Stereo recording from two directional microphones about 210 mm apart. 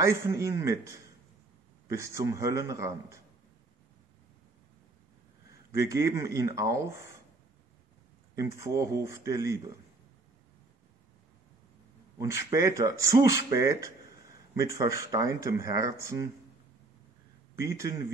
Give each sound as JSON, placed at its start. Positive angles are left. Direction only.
{"t": 0.0, "sound": "speech", "side_deg": -15}
{"t": 5.7, "sound": "speech", "side_deg": -15}
{"t": 8.4, "sound": "speech", "side_deg": -15}
{"t": 12.2, "sound": "speech", "side_deg": -15}
{"t": 17.6, "sound": "speech", "side_deg": -15}